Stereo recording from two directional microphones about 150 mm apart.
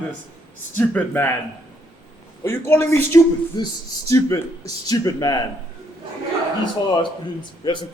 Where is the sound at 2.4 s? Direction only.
15° left (ahead or behind).